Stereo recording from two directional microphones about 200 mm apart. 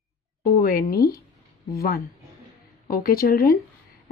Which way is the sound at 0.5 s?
50° left (ahead or behind).